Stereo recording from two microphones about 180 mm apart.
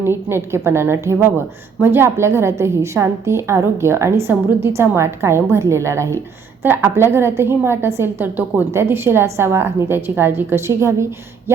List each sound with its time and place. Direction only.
0.0 s a woman's voice: 15° right (ahead or behind)